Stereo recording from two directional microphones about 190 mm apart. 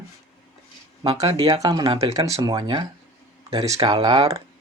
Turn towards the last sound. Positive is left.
turn(degrees=-20)  # may be behind; listen again after turning